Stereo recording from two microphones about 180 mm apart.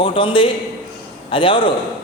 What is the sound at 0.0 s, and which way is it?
A man's voice, 25° left (ahead or behind).